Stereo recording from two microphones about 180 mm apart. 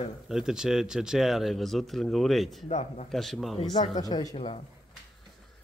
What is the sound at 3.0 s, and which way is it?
Speech, centre (ahead or behind).